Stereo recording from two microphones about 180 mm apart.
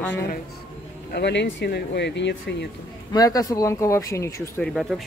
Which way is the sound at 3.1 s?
20° left (ahead or behind).